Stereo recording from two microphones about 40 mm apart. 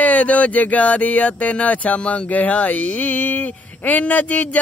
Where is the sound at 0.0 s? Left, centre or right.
Left.